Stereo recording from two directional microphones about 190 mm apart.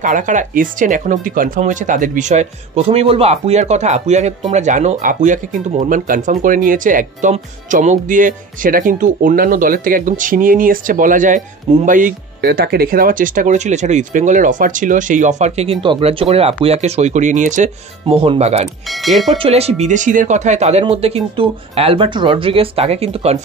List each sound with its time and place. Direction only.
0.0 s speech: 40° right (ahead or behind)
18.9 s speech: centre (ahead or behind)
19.3 s speech: 30° right (ahead or behind)